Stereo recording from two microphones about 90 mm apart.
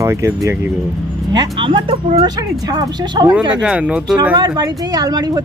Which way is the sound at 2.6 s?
45° right (ahead or behind).